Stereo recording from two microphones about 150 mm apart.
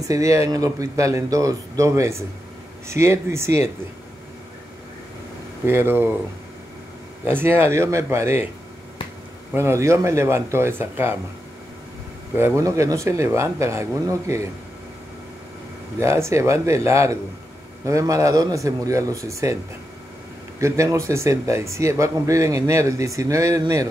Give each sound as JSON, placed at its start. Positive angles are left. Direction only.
{"t": 0.0, "sound": "speech", "side_deg": -20}
{"t": 5.7, "sound": "speech", "side_deg": -15}
{"t": 7.2, "sound": "speech", "side_deg": -15}
{"t": 9.5, "sound": "speech", "side_deg": -20}
{"t": 12.4, "sound": "speech", "side_deg": -20}
{"t": 16.0, "sound": "speech", "side_deg": -20}
{"t": 20.6, "sound": "speech", "side_deg": -20}